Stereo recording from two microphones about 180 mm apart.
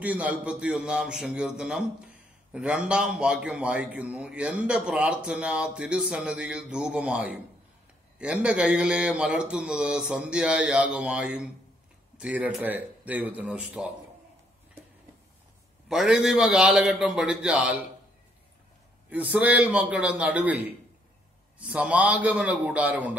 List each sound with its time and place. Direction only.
0.0 s a man's voice: 10° right (ahead or behind)
15.9 s a man's voice: centre (ahead or behind)
19.0 s a man's voice: 10° right (ahead or behind)
21.5 s a man's voice: 5° right (ahead or behind)